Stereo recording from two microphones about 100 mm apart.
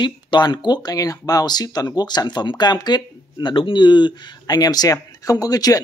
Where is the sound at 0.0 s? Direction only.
50° left (ahead or behind).